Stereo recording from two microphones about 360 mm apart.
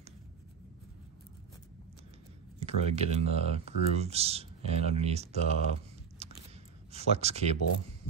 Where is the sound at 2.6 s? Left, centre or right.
Centre.